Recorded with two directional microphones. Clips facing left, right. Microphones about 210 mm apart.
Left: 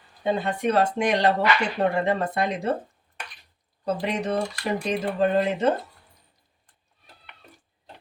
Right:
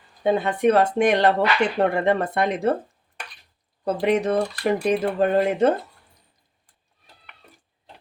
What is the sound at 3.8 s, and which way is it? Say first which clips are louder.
Speech: right 6 dB; 55° right (ahead or behind).